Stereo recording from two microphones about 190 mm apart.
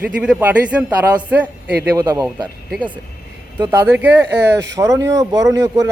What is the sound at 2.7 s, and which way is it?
Speech, 10° right (ahead or behind).